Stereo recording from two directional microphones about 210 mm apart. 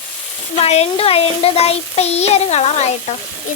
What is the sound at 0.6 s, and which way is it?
Child singing, 30° left (ahead or behind).